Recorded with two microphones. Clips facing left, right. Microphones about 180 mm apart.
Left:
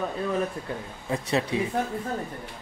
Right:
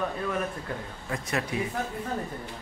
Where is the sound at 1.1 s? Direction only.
25° left (ahead or behind).